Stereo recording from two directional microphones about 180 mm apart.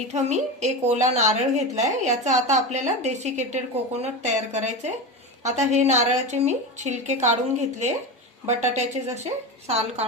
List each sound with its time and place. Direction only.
0.1 s a woman's voice: 40° right (ahead or behind)